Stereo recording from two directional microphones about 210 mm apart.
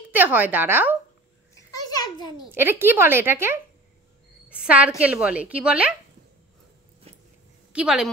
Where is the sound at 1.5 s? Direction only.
15° left (ahead or behind).